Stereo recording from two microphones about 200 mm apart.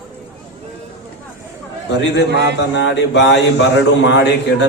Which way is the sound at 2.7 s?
65° left (ahead or behind).